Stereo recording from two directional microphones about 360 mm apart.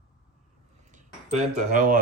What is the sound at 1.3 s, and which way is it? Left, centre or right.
Speech, right.